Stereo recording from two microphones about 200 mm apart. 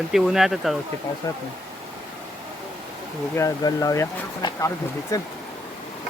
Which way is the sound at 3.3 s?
15° left (ahead or behind).